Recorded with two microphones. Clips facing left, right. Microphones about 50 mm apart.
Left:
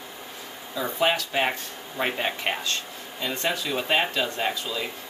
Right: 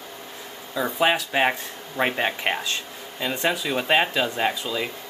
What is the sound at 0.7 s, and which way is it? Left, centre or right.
Speech, centre.